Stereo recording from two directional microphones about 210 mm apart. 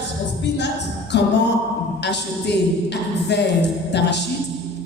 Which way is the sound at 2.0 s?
55° left (ahead or behind).